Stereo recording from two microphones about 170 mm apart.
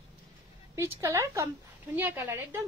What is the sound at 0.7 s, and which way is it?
A woman's voice, 15° right (ahead or behind).